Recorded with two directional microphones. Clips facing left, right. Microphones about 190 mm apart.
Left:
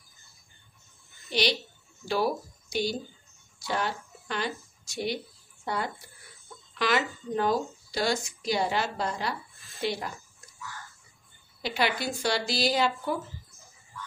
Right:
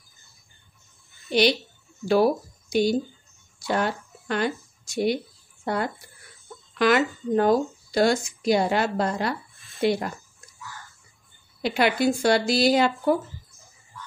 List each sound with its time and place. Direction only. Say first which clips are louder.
2.0 s speech: right 8 dB; 55° right (ahead or behind)
11.6 s speech: right 7 dB; 55° right (ahead or behind)